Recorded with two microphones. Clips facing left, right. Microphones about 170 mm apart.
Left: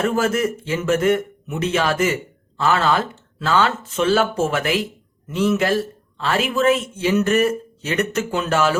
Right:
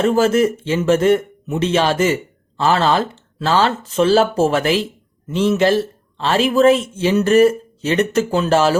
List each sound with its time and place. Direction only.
0.0 s a man's voice: 25° right (ahead or behind)